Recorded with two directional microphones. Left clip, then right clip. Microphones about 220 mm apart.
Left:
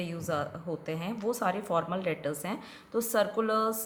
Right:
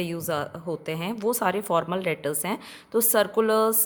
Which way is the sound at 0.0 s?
50° right (ahead or behind).